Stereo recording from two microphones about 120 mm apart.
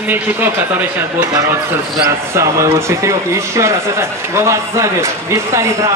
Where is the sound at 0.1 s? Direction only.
15° right (ahead or behind).